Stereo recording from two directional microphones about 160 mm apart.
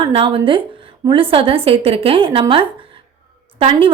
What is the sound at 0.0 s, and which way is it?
A woman's voice, 35° right (ahead or behind).